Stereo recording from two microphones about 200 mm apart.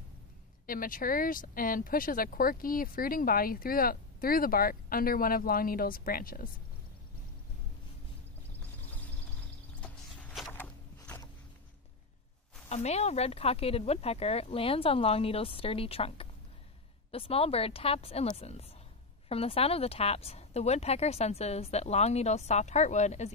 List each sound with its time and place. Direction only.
0.7 s speech: 45° left (ahead or behind)
9.8 s a sound: 5° left (ahead or behind)
12.6 s speech: 35° left (ahead or behind)